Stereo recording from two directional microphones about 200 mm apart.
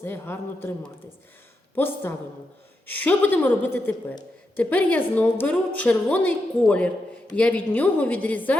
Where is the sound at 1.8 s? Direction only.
10° left (ahead or behind).